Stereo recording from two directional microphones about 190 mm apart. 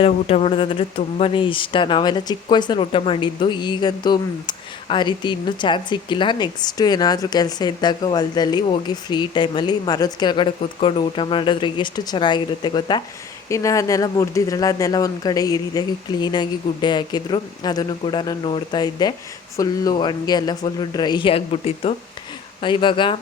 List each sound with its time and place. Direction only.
0.0 s speech: 30° left (ahead or behind)